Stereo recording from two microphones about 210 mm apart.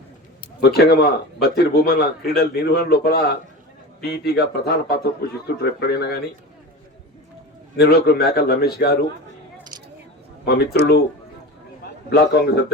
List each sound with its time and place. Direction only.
0.4 s speech: 50° left (ahead or behind)
7.8 s speech: 50° left (ahead or behind)
10.4 s speech: 50° left (ahead or behind)
12.1 s speech: 50° left (ahead or behind)